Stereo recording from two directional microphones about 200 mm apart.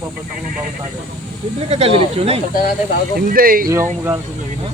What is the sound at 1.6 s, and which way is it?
Speech, 30° right (ahead or behind).